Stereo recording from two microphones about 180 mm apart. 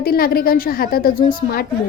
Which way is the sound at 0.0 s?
55° left (ahead or behind).